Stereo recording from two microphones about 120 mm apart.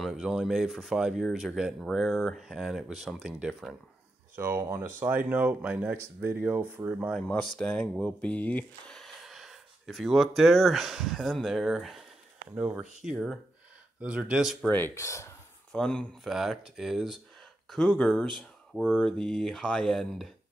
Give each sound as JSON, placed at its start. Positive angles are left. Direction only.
{"t": 0.0, "sound": "speech", "side_deg": -5}
{"t": 4.4, "sound": "speech", "side_deg": -20}
{"t": 7.2, "sound": "speech", "side_deg": 10}
{"t": 14.7, "sound": "speech", "side_deg": 20}
{"t": 15.7, "sound": "speech", "side_deg": 5}